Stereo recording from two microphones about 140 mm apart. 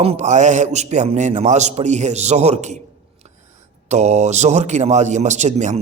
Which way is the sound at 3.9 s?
55° right (ahead or behind).